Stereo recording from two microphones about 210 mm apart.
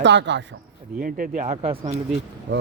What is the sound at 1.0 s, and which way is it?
Speech, 40° right (ahead or behind).